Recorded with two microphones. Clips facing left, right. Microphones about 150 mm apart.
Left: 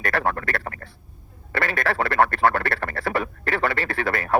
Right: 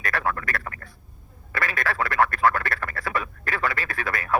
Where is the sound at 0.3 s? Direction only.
30° left (ahead or behind).